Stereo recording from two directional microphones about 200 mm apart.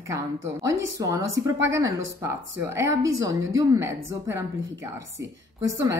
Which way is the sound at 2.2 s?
15° right (ahead or behind).